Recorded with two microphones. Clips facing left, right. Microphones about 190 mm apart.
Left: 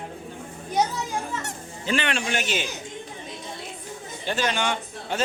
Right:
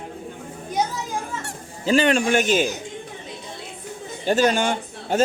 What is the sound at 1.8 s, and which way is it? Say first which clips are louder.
Speech: right 8 dB; 40° right (ahead or behind).